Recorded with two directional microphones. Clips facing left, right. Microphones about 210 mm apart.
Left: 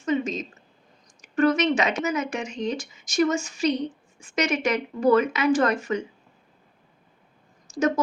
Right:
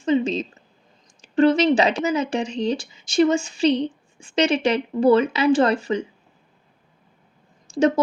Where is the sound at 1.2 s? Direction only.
30° right (ahead or behind).